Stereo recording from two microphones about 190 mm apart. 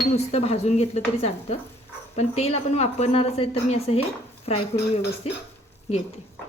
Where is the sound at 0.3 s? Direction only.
35° left (ahead or behind).